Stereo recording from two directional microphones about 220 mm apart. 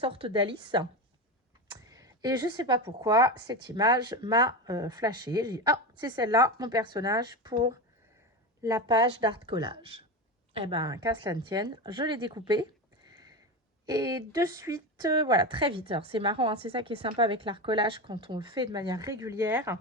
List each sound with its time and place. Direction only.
0.0 s speech: 25° right (ahead or behind)
1.9 s speech: 15° right (ahead or behind)
13.8 s speech: 15° right (ahead or behind)